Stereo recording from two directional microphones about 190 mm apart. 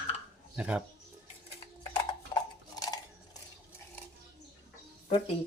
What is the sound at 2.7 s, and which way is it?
Cutlery, 20° left (ahead or behind).